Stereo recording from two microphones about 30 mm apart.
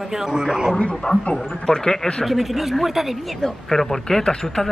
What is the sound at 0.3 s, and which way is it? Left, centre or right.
Speech, right.